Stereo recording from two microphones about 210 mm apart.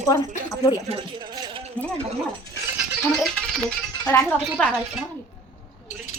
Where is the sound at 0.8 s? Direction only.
20° right (ahead or behind).